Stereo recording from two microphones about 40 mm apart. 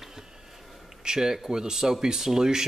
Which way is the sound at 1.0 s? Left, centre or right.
Centre.